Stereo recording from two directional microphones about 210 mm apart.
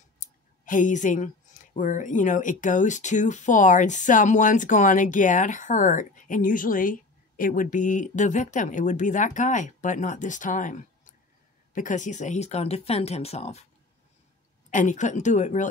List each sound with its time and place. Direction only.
0.2 s speech: 40° left (ahead or behind)
14.7 s speech: 35° left (ahead or behind)